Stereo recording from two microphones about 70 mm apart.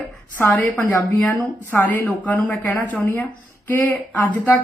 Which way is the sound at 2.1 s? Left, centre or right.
Left.